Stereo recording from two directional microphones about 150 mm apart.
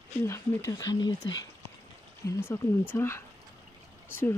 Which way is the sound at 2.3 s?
15° left (ahead or behind).